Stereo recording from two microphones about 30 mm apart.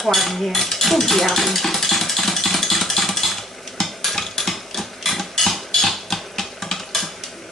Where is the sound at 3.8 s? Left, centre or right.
Centre.